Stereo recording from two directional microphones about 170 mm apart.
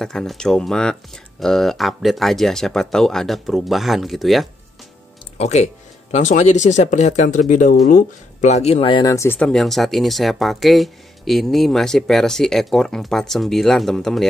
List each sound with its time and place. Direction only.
0.0 s speech: 5° left (ahead or behind)
5.4 s speech: 40° left (ahead or behind); by 14.3 s 5° left (ahead or behind)